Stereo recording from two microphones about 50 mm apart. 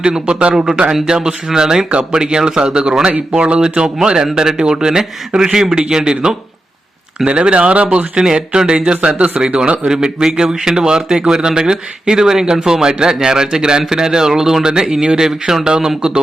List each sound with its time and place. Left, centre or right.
0.0 s a man's voice: centre
7.3 s a man's voice: right